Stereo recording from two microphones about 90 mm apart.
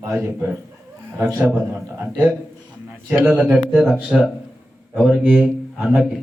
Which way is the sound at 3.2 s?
20° right (ahead or behind).